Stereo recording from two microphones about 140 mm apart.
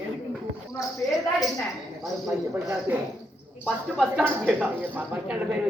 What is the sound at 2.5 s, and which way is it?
Speech, 20° right (ahead or behind).